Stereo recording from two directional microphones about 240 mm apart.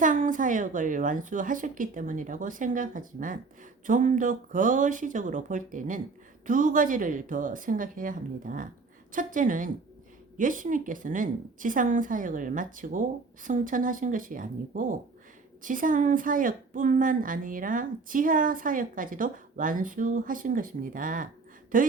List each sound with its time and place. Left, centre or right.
0.0 s a woman's voice: right